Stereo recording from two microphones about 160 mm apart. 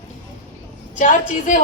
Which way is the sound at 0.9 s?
55° left (ahead or behind).